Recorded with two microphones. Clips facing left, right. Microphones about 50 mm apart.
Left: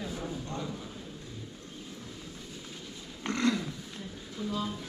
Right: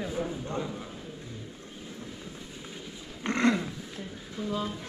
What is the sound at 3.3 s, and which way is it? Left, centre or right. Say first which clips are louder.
Roaring cats: right 3 dB; right.